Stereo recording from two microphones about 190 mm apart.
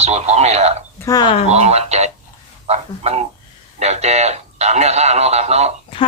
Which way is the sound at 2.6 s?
35° right (ahead or behind).